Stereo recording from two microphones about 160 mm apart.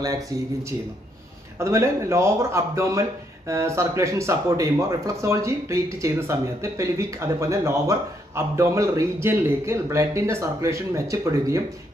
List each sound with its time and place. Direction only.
1.5 s speech: 15° right (ahead or behind)